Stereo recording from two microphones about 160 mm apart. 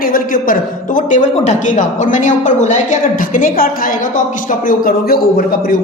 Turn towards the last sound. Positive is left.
turn(degrees=65)  # may be behind; listen again after turning